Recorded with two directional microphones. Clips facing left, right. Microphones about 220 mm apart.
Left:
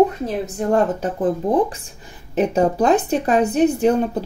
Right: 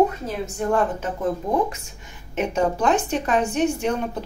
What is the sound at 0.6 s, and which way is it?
Speech, 35° left (ahead or behind).